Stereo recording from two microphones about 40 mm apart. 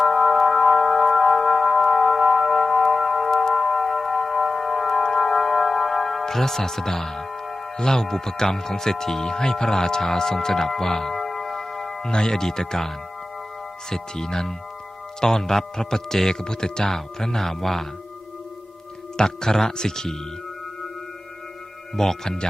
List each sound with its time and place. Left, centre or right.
0.0 s music: centre
7.8 s speech: centre
13.9 s speech: centre
19.1 s speech: centre
21.9 s speech: centre